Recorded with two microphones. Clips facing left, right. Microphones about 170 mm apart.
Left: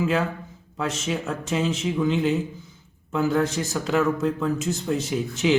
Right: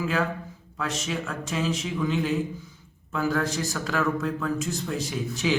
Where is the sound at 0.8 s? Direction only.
25° left (ahead or behind).